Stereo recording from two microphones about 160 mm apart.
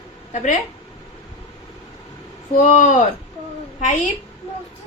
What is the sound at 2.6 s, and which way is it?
A woman's voice, 50° left (ahead or behind).